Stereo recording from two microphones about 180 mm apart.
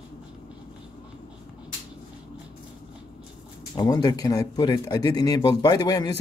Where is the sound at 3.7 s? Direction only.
25° left (ahead or behind).